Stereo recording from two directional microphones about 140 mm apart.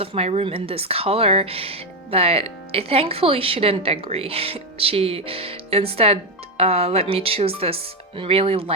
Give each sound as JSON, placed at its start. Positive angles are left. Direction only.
{"t": 0.0, "sound": "a woman's voice", "side_deg": -45}